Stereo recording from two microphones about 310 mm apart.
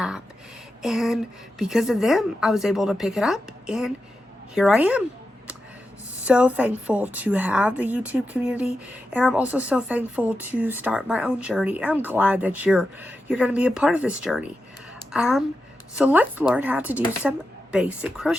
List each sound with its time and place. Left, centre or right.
0.8 s a woman's voice: centre
6.2 s a woman's voice: centre